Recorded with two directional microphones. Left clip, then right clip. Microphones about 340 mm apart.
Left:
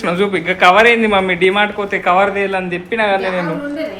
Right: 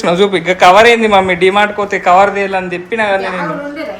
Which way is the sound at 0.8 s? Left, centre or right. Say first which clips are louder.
Right 3 dB; right.